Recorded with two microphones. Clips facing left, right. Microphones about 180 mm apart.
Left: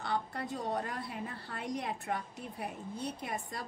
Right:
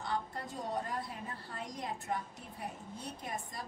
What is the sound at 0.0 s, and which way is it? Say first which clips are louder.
A woman's voice: left 2 dB; 65° left (ahead or behind).